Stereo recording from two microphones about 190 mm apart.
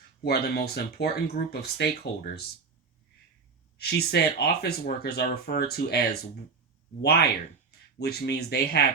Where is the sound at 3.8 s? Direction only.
55° left (ahead or behind).